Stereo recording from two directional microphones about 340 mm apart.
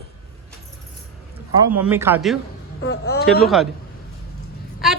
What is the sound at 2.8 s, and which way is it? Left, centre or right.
Speech, left.